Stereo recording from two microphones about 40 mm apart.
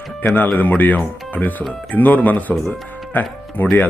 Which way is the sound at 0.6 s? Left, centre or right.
Left.